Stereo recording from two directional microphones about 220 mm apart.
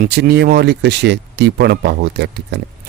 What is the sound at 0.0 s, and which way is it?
Speech, 45° right (ahead or behind).